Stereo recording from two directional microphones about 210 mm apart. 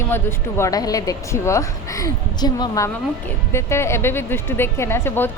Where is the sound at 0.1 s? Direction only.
10° left (ahead or behind).